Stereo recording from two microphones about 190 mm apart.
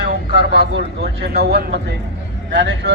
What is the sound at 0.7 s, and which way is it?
Speech, 60° right (ahead or behind).